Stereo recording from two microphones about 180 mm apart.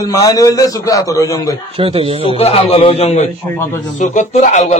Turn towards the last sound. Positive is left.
turn(degrees=40)  # may be behind; listen again after turning